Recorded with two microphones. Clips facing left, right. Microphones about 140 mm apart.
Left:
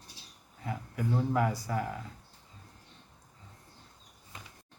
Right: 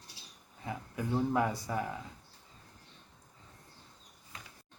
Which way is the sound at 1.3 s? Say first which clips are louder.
Left 1 dB; 20° right (ahead or behind).